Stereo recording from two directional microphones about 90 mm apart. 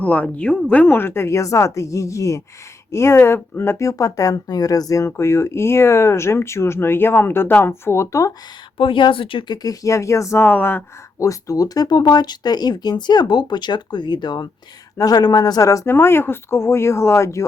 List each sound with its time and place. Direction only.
0.0 s speech: 15° left (ahead or behind); by 8.3 s 35° left (ahead or behind)
8.8 s speech: 70° left (ahead or behind)
9.5 s speech: 40° left (ahead or behind); by 10.8 s 20° left (ahead or behind)
11.2 s speech: 40° left (ahead or behind)